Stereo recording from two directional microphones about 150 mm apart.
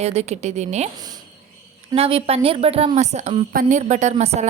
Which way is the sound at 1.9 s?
40° right (ahead or behind).